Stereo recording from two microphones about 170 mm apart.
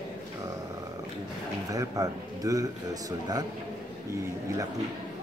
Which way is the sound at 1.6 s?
20° right (ahead or behind).